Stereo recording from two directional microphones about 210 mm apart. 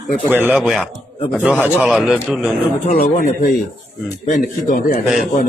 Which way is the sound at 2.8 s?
35° left (ahead or behind).